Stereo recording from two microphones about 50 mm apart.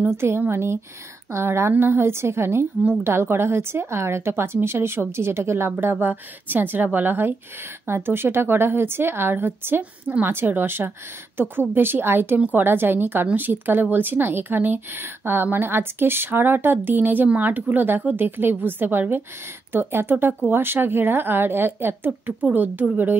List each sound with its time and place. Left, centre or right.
0.5 s a woman's voice: right
1.7 s a woman's voice: right
5.7 s a woman's voice: right